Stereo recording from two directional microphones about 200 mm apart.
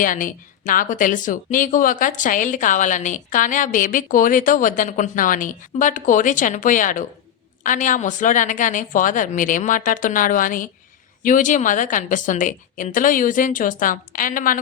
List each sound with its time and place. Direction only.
0.0 s speech: 40° left (ahead or behind)